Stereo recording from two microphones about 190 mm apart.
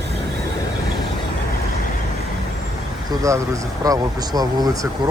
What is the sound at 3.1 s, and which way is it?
Speech, 15° right (ahead or behind).